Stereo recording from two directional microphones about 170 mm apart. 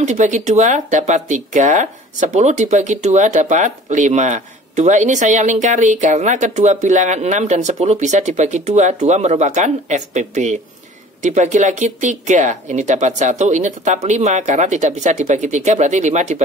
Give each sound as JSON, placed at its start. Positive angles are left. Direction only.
{"t": 0.0, "sound": "speech", "side_deg": -45}